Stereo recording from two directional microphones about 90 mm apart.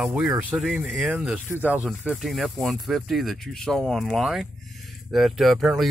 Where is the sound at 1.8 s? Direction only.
5° right (ahead or behind).